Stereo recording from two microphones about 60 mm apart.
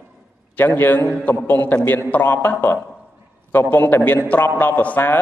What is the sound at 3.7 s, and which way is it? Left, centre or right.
A man's voice, left.